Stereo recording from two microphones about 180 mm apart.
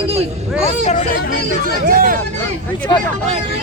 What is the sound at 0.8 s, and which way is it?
Speech, 40° left (ahead or behind).